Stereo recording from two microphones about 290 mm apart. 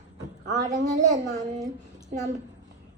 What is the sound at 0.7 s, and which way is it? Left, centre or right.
Speech, right.